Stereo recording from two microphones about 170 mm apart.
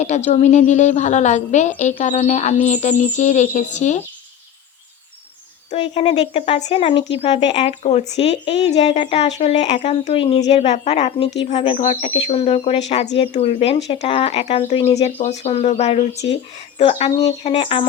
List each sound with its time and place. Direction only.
0.0 s a woman's voice: 40° left (ahead or behind)
5.7 s a woman's voice: 35° left (ahead or behind)
12.1 s speech: 35° left (ahead or behind)